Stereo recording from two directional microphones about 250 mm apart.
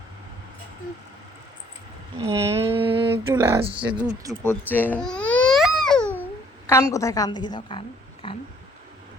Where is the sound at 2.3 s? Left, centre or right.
Right.